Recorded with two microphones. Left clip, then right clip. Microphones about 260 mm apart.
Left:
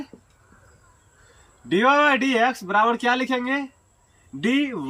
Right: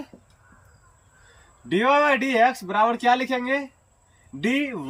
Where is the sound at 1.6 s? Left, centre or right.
Centre.